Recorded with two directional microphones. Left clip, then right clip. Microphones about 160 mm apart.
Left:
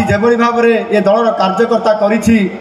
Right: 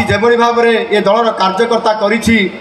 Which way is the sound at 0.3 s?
30° left (ahead or behind).